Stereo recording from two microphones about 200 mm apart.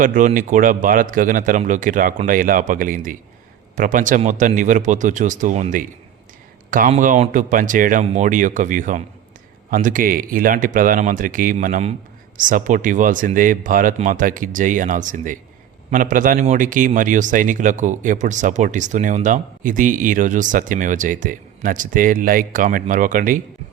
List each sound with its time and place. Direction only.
0.0 s a man's voice: 40° right (ahead or behind)